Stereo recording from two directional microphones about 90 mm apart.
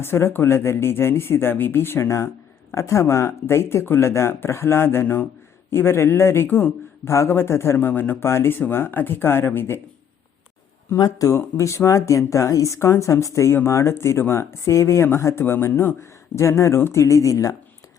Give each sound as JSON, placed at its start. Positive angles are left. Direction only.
{"t": 0.0, "sound": "a man's voice", "side_deg": 25}
{"t": 10.9, "sound": "speech", "side_deg": 40}